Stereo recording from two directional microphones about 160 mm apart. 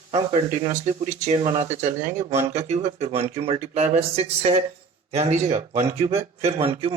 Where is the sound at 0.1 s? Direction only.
40° right (ahead or behind).